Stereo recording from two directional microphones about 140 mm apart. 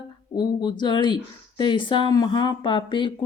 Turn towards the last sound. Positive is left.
turn(degrees=35)  # may be behind; listen again after turning